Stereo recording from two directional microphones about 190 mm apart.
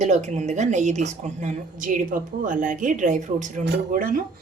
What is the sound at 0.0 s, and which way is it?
A woman's voice, 40° right (ahead or behind).